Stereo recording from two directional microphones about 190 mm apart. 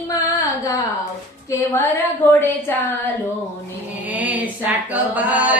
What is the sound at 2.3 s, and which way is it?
Speech, 10° left (ahead or behind).